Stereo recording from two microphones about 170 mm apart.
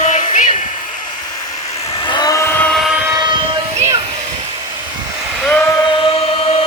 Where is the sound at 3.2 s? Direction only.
30° right (ahead or behind).